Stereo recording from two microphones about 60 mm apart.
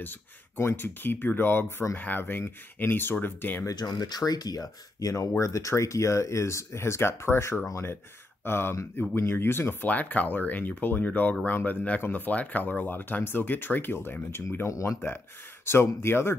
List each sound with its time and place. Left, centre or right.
0.6 s speech: left
3.6 s speech: left
9.8 s speech: left
14.7 s speech: left
15.6 s speech: left